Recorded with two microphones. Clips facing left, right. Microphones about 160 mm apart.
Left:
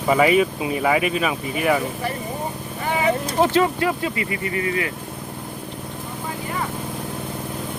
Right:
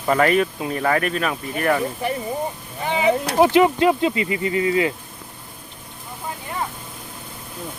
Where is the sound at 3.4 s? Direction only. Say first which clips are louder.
Right 4 dB; 15° right (ahead or behind).